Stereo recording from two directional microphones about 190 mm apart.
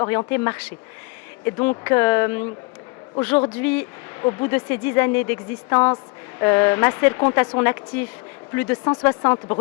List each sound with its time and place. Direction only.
0.0 s speech: 20° left (ahead or behind)
0.3 s speech: 10° left (ahead or behind)
4.2 s speech: 20° left (ahead or behind)